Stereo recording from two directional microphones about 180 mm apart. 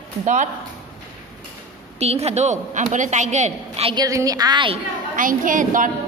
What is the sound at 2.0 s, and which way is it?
A man's voice, 35° right (ahead or behind).